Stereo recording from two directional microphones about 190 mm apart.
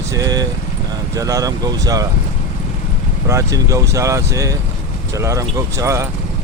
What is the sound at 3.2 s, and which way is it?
Speech, 15° right (ahead or behind).